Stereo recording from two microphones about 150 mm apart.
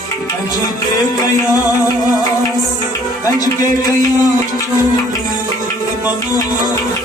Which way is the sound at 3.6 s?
25° left (ahead or behind).